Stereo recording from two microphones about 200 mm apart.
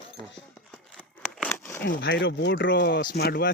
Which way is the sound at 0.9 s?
5° right (ahead or behind).